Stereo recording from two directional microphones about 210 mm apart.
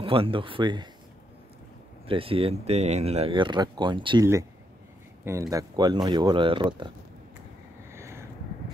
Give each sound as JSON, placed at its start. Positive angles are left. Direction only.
{"t": 0.0, "sound": "speech", "side_deg": -25}
{"t": 2.0, "sound": "speech", "side_deg": -25}
{"t": 7.9, "sound": "vehicle", "side_deg": -15}